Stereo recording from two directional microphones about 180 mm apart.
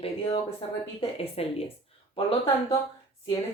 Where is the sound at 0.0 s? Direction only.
30° left (ahead or behind).